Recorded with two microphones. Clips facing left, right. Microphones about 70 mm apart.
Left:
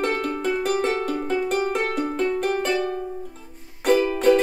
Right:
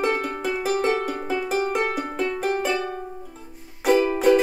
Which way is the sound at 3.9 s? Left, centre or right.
Centre.